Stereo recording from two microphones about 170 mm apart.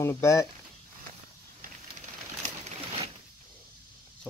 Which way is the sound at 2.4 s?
40° right (ahead or behind).